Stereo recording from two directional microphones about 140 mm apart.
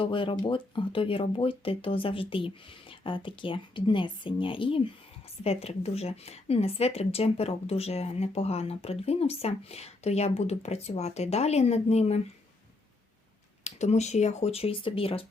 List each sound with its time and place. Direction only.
0.0 s a woman's voice: 40° left (ahead or behind)
13.7 s a woman's voice: 55° left (ahead or behind)